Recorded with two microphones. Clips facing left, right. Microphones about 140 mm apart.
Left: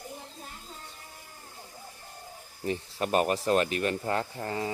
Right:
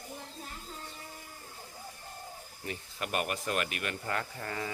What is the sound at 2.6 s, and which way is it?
Speech, 35° left (ahead or behind).